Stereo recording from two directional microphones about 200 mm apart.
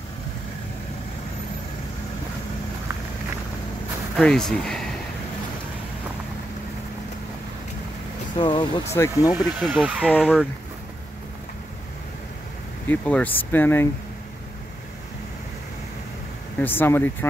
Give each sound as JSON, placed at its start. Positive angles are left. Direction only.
{"t": 4.2, "sound": "speech", "side_deg": 0}
{"t": 8.4, "sound": "speech", "side_deg": 20}
{"t": 9.7, "sound": "speech", "side_deg": -10}
{"t": 12.8, "sound": "speech", "side_deg": 10}
{"t": 16.5, "sound": "speech", "side_deg": 10}